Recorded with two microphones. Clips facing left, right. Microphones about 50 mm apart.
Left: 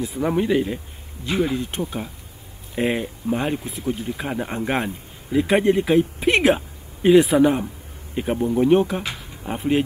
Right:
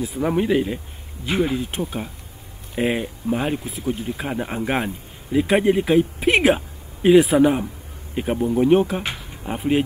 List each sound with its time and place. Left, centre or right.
0.0 s speech: centre
1.2 s speech: centre
1.5 s speech: centre